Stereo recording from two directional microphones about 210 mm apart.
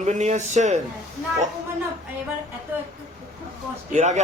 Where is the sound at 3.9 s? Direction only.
35° right (ahead or behind).